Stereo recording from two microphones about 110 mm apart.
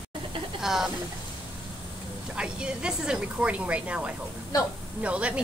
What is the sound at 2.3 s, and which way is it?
Speech, 10° right (ahead or behind).